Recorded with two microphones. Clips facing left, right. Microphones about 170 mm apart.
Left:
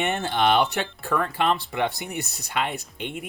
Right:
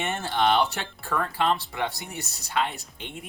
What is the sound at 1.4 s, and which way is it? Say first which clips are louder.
Speech: left 1 dB; 60° left (ahead or behind).